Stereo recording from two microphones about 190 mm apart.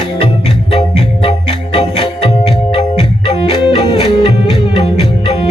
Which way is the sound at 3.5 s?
25° left (ahead or behind).